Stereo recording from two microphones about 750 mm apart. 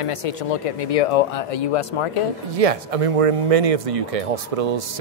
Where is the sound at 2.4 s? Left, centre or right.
Right.